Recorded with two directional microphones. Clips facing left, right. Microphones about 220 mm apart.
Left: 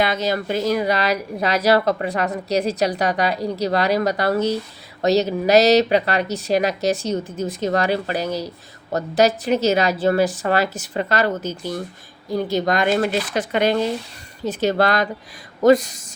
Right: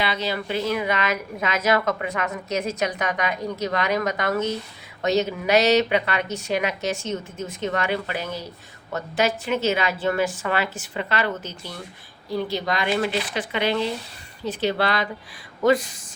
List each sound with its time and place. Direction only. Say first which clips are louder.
0.0 s speech: left 5 dB; 45° left (ahead or behind)